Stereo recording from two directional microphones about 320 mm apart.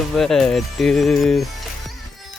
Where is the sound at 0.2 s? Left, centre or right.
Centre.